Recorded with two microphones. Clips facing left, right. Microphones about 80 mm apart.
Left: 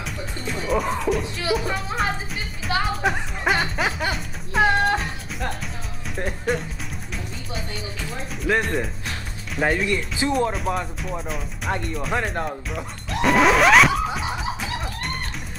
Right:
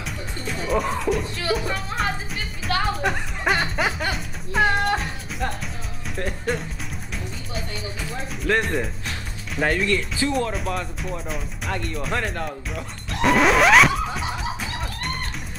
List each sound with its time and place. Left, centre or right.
0.0 s music: centre
8.5 s speech: centre
9.8 s speech: centre
10.5 s speech: centre
12.7 s music: centre